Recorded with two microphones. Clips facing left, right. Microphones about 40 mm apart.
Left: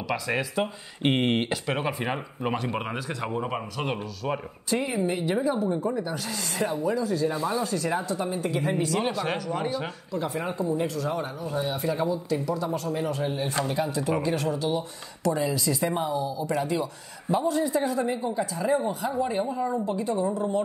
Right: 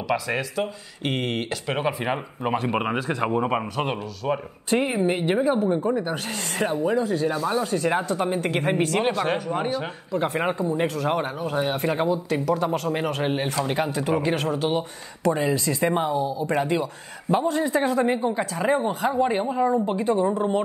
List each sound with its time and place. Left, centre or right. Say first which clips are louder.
0.4 s speech: right 1 dB; centre
1.7 s speech: right 3 dB; centre
2.6 s speech: right 6 dB; right
4.2 s speech: right 4 dB; centre
4.6 s speech: right 4 dB; right
9.1 s speech: right 4 dB; centre
10.1 s speech: right 5 dB; right